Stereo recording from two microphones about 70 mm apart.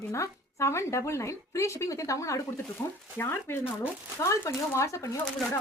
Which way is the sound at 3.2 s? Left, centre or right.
Left.